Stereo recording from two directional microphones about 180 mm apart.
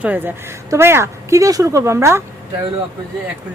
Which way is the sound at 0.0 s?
10° right (ahead or behind).